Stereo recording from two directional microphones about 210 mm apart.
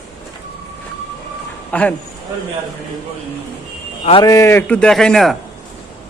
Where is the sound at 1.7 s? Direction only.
5° left (ahead or behind).